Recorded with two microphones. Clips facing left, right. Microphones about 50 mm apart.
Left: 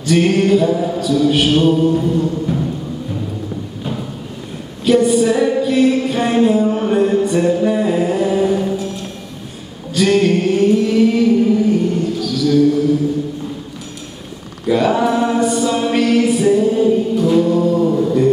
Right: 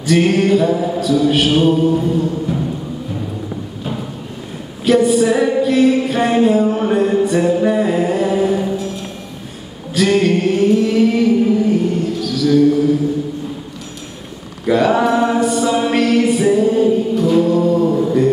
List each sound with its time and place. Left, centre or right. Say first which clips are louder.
0.0 s music: even; centre
4.8 s a sound: even; centre
9.9 s music: even; centre
14.7 s a capella: right 1 dB; centre